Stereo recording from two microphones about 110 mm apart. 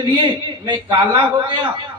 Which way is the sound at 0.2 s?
50° right (ahead or behind).